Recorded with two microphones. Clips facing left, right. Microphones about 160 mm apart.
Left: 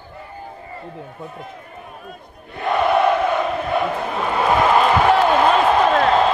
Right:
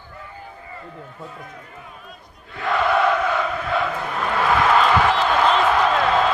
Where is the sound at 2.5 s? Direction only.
20° left (ahead or behind).